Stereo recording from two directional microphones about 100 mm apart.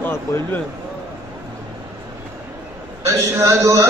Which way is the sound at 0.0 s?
20° left (ahead or behind).